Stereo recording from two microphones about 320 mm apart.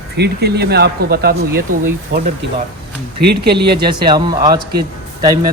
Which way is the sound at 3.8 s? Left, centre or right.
Centre.